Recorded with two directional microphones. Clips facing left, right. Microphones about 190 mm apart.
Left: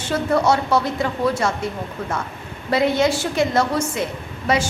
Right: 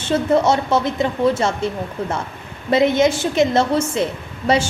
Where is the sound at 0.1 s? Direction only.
20° right (ahead or behind).